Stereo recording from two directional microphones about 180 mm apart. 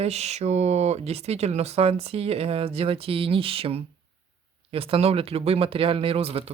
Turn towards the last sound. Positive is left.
turn(degrees=-35)  # may be behind; listen again after turning